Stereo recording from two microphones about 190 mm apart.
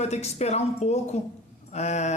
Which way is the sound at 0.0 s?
35° left (ahead or behind).